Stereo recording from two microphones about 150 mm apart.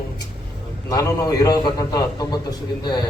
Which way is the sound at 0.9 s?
20° left (ahead or behind).